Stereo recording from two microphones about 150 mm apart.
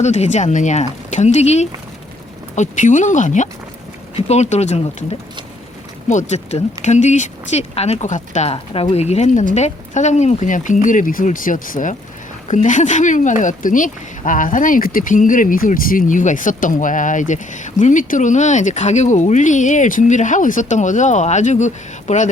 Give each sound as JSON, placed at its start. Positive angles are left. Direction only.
{"t": 0.0, "sound": "speech", "side_deg": 50}
{"t": 6.1, "sound": "speech", "side_deg": 55}